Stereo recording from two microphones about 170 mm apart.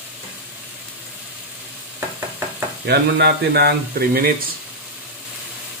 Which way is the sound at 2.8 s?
70° right (ahead or behind).